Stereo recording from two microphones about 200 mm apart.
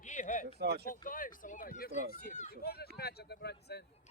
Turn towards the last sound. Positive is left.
turn(degrees=55)  # may be behind; listen again after turning